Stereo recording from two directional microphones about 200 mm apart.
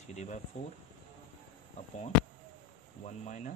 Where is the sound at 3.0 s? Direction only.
35° left (ahead or behind).